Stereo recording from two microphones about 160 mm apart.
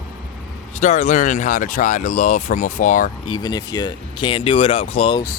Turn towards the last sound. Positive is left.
turn(degrees=35)  # may be behind; listen again after turning